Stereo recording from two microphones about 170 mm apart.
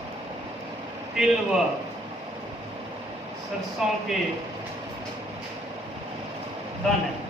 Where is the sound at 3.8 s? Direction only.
Centre (ahead or behind).